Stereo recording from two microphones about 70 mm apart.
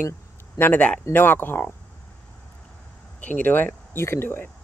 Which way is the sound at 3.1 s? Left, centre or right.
Left.